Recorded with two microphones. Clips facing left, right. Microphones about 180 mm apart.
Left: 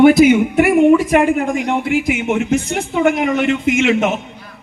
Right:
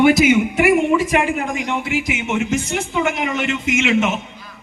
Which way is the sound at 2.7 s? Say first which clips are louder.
Left 3 dB; 40° left (ahead or behind).